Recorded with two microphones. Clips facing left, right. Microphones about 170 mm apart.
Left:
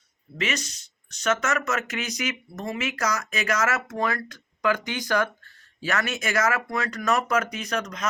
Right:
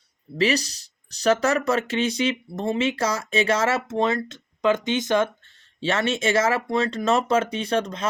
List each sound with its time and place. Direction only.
0.3 s speech: 35° right (ahead or behind)